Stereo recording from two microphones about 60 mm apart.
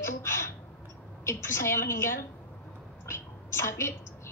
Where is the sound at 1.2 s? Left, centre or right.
Left.